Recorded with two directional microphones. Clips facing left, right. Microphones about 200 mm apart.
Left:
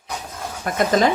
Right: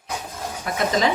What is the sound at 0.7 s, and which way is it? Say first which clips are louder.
Speech: left 3 dB; 50° left (ahead or behind).